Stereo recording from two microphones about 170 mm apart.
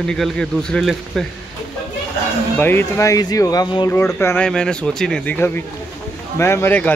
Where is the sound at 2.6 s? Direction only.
10° left (ahead or behind).